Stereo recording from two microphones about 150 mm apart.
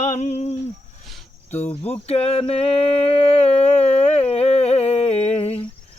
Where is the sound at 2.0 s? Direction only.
45° left (ahead or behind).